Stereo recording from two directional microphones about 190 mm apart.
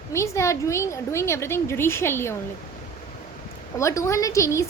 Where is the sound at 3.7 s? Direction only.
15° left (ahead or behind).